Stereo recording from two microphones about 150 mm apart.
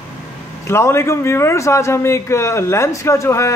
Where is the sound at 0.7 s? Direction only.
15° left (ahead or behind).